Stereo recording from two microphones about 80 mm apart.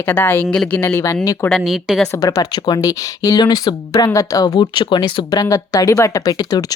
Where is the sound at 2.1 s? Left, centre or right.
Left.